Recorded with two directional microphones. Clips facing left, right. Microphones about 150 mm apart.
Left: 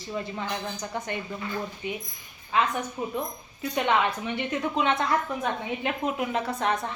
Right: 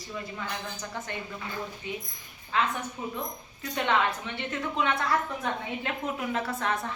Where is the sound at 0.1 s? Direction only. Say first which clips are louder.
Left 5 dB; 35° left (ahead or behind).